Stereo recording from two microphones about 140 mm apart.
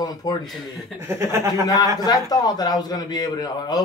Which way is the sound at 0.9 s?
20° right (ahead or behind).